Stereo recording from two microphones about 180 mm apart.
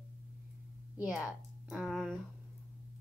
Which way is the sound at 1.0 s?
5° right (ahead or behind).